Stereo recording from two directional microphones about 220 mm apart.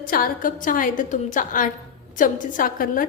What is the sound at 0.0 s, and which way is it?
A woman's voice, 40° left (ahead or behind).